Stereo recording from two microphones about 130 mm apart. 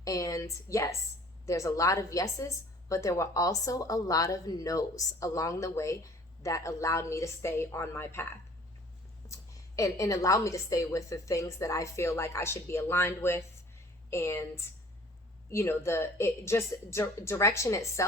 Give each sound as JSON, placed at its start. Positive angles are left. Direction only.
{"t": 0.0, "sound": "speech", "side_deg": 25}
{"t": 9.3, "sound": "speech", "side_deg": 25}